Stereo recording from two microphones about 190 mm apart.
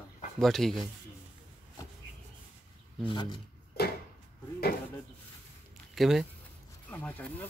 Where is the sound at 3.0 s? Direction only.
25° left (ahead or behind).